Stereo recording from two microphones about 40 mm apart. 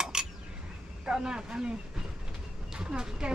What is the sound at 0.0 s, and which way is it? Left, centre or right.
Cutlery, centre.